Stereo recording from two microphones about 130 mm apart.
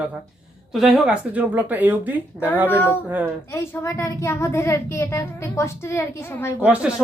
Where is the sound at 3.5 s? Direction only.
25° left (ahead or behind).